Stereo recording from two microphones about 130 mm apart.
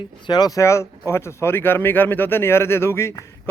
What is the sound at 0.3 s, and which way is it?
Speech, 30° left (ahead or behind).